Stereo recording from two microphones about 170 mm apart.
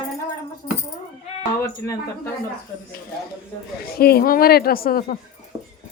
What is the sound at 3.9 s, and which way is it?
A woman's voice, 65° left (ahead or behind).